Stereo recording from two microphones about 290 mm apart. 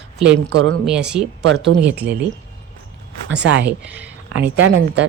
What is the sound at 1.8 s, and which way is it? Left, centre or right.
Speech, centre.